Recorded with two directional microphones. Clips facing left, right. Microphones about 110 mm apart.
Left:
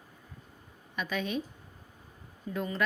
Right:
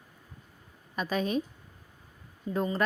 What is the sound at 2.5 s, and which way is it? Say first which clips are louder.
Speech: right 3 dB; 35° right (ahead or behind).